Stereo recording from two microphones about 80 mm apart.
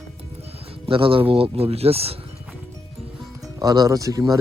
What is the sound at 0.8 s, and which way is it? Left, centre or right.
Speech, right.